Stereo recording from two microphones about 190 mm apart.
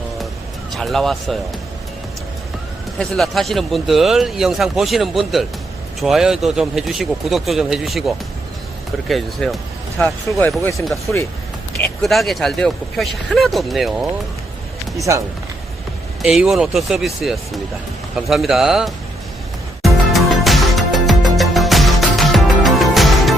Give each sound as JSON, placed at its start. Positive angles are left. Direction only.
{"t": 0.7, "sound": "speech", "side_deg": 0}
{"t": 3.0, "sound": "speech", "side_deg": 0}
{"t": 10.6, "sound": "speech", "side_deg": 15}
{"t": 16.2, "sound": "speech", "side_deg": 0}
{"t": 19.8, "sound": "music", "side_deg": 0}